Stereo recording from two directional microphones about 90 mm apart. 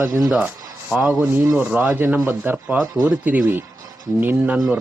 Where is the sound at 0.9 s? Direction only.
15° right (ahead or behind).